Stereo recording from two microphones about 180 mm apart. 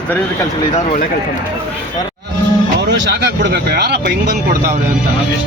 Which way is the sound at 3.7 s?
65° right (ahead or behind).